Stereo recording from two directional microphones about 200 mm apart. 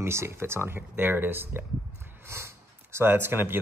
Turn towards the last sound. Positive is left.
turn(degrees=-10)  # may be behind; listen again after turning